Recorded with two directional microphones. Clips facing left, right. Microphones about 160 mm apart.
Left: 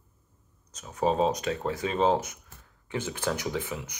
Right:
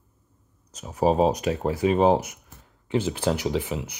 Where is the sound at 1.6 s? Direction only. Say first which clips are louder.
Right 5 dB; 30° right (ahead or behind).